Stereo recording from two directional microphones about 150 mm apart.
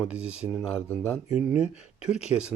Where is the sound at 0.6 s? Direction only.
15° left (ahead or behind).